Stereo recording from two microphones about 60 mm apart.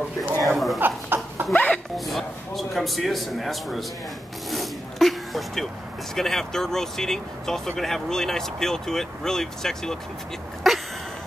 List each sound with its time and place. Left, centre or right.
0.4 s speech: centre
0.7 s speech: right
2.0 s speech: centre
4.5 s zipper: centre
6.1 s speech: centre